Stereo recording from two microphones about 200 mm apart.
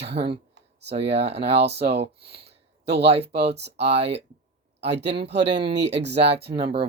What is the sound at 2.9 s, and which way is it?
Speech, 30° right (ahead or behind).